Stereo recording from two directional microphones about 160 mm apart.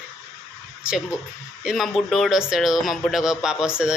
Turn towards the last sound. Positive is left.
turn(degrees=-5)  # may be behind; listen again after turning